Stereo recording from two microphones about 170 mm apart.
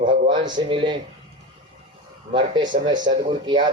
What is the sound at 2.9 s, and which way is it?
Speech, 50° right (ahead or behind).